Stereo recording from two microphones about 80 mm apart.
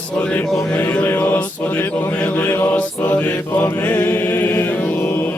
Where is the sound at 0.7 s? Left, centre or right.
Left.